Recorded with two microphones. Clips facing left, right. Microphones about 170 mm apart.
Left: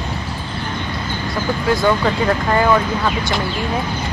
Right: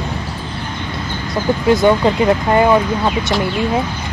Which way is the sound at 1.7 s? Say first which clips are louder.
Right 4 dB; 20° right (ahead or behind).